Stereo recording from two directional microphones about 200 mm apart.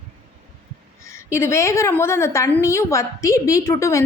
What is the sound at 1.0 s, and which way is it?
A woman's voice, 15° left (ahead or behind).